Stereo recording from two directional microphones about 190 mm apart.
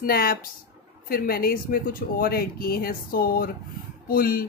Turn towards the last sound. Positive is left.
turn(degrees=50)  # may be behind; listen again after turning